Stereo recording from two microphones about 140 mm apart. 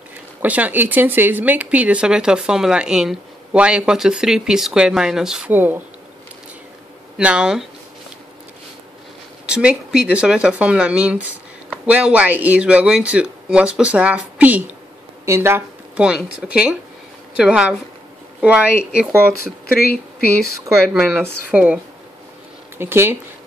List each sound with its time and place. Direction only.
0.4 s speech: 10° right (ahead or behind)
7.2 s speech: 5° right (ahead or behind)
9.5 s speech: 5° right (ahead or behind)
16.0 s speech: 5° right (ahead or behind)
19.6 s speech: 90° left
20.9 s speech: centre (ahead or behind)
22.8 s speech: 15° right (ahead or behind)